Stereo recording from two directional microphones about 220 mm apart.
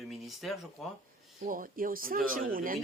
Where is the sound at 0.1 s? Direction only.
Centre (ahead or behind).